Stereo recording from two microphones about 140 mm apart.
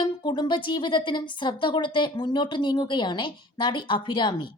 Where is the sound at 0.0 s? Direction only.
35° left (ahead or behind).